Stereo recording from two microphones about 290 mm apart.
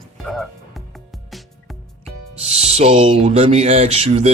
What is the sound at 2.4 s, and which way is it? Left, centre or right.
Speech, right.